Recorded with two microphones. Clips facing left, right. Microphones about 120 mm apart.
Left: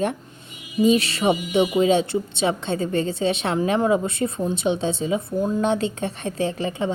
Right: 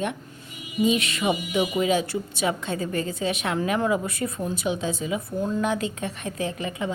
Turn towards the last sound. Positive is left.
turn(degrees=30)  # may be behind; listen again after turning